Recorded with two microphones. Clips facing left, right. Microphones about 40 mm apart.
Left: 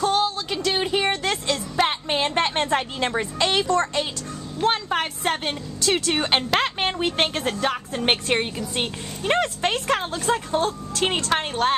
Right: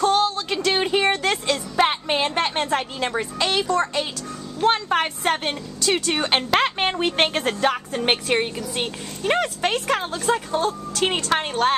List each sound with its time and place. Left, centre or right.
0.0 s music: centre
2.3 s a woman's voice: centre
3.6 s a woman's voice: centre
4.6 s a woman's voice: centre
8.0 s a woman's voice: centre